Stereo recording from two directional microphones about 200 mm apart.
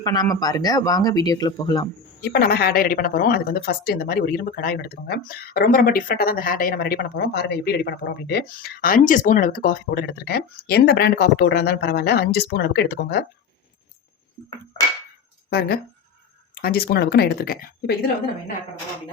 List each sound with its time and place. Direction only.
0.0 s speech: 20° left (ahead or behind)
2.2 s speech: 50° left (ahead or behind)
15.4 s speech: 50° left (ahead or behind)